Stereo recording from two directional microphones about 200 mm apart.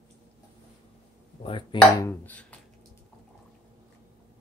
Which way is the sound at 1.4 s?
25° left (ahead or behind).